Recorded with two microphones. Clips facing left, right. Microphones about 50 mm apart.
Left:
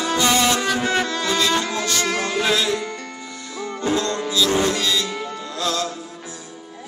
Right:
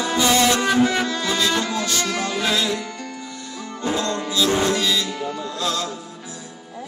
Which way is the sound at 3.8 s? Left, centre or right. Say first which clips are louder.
Left 1 dB; centre.